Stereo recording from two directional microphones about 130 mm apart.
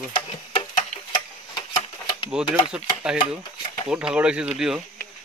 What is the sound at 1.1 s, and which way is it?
Tick-tock, 40° left (ahead or behind).